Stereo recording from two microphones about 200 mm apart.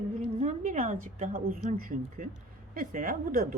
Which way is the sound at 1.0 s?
40° right (ahead or behind).